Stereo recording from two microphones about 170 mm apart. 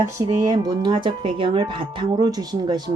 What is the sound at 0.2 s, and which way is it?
Speech, 20° right (ahead or behind).